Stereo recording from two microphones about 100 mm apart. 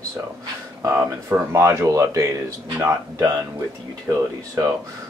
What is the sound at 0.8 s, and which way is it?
Speech, 30° right (ahead or behind).